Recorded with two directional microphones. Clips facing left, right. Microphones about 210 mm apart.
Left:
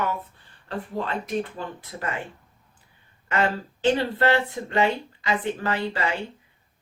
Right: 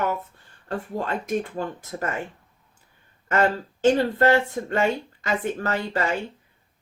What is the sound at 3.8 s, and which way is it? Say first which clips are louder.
Speech: right 3 dB; 45° right (ahead or behind).